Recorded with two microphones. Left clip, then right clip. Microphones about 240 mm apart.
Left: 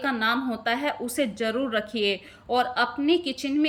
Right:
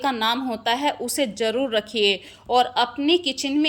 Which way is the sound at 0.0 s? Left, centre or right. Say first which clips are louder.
Right 3 dB; centre.